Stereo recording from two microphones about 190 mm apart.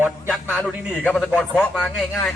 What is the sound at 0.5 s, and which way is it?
A man's voice, 10° left (ahead or behind).